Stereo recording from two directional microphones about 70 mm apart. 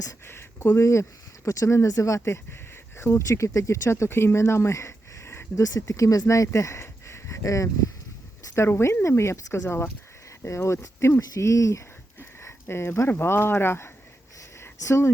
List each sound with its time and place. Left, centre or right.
0.3 s speech: left
5.6 s speech: left